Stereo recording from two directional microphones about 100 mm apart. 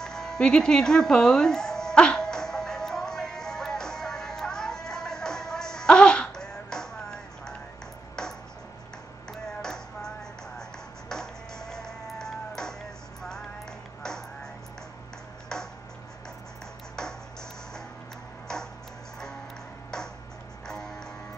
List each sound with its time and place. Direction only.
0.0 s music: 5° left (ahead or behind)
8.2 s a sound: 5° left (ahead or behind)
9.3 s music: 5° left (ahead or behind)
14.0 s music: 5° left (ahead or behind)
15.5 s chopping: 5° left (ahead or behind)
18.5 s ping: 5° left (ahead or behind)
20.6 s music: 5° left (ahead or behind)